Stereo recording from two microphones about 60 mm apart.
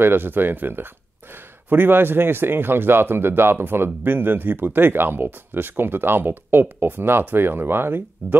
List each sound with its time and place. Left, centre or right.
0.0 s a man's voice: right